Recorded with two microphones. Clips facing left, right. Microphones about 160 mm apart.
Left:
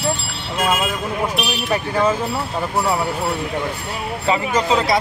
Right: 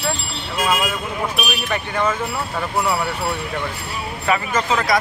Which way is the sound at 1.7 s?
30° left (ahead or behind).